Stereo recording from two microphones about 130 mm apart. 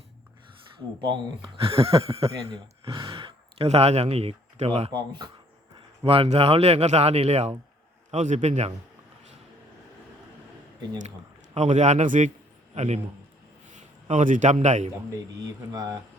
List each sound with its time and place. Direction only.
1.0 s speech: 40° right (ahead or behind)
4.9 s a man's voice: 35° right (ahead or behind); by 8.7 s 55° right (ahead or behind)
11.5 s a man's voice: 65° right (ahead or behind)
12.7 s a man's voice: 60° right (ahead or behind)
13.7 s a man's voice: 75° right (ahead or behind)
15.4 s speech: 30° right (ahead or behind)